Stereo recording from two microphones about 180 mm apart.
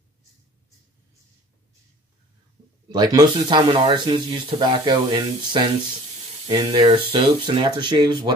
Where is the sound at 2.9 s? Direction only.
20° right (ahead or behind).